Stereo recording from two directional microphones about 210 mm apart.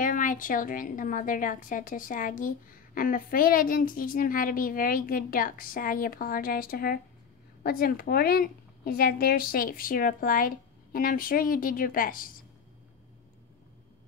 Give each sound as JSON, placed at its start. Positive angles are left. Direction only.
{"t": 0.0, "sound": "a woman's voice", "side_deg": 40}